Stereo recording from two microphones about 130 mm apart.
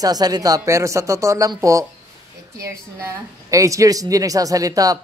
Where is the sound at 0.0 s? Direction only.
30° right (ahead or behind).